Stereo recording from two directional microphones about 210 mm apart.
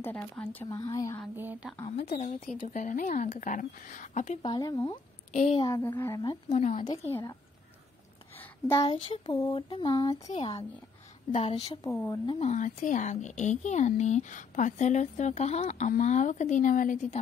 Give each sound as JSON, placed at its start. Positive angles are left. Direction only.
{"t": 0.0, "sound": "speech", "side_deg": 5}
{"t": 0.7, "sound": "speech", "side_deg": 20}
{"t": 1.3, "sound": "speech", "side_deg": -10}
{"t": 1.9, "sound": "speech", "side_deg": 30}
{"t": 4.5, "sound": "speech", "side_deg": 20}
{"t": 5.3, "sound": "a woman's voice", "side_deg": 35}
{"t": 5.6, "sound": "speech", "side_deg": 20}
{"t": 6.5, "sound": "speech", "side_deg": 35}
{"t": 6.9, "sound": "speech", "side_deg": 10}
{"t": 8.6, "sound": "speech", "side_deg": 15}
{"t": 9.5, "sound": "a sound", "side_deg": 25}
{"t": 11.9, "sound": "speech", "side_deg": 10}
{"t": 12.3, "sound": "speech", "side_deg": 30}